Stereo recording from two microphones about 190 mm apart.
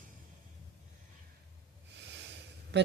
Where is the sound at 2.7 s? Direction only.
65° right (ahead or behind).